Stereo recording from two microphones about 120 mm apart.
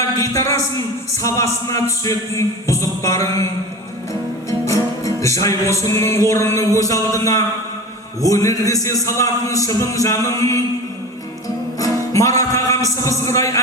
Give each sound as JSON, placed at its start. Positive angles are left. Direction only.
{"t": 0.2, "sound": "a man's voice", "side_deg": 25}
{"t": 4.6, "sound": "music", "side_deg": 25}
{"t": 6.7, "sound": "a man's voice", "side_deg": 30}
{"t": 11.8, "sound": "speech", "side_deg": 30}